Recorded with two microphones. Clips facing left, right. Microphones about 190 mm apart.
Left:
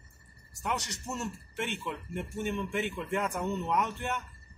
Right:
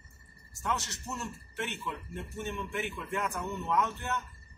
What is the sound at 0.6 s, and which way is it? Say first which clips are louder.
A man's voice: left 1 dB; 20° left (ahead or behind).